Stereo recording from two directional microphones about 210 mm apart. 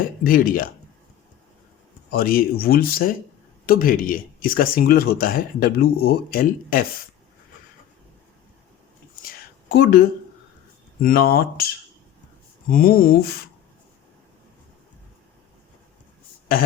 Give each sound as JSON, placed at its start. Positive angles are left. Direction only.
{"t": 0.3, "sound": "speech", "side_deg": 45}
{"t": 2.0, "sound": "speech", "side_deg": 45}
{"t": 9.2, "sound": "a sound", "side_deg": 45}
{"t": 11.0, "sound": "speech", "side_deg": 45}